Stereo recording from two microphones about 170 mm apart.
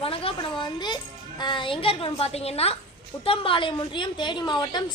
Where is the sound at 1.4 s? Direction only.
25° left (ahead or behind).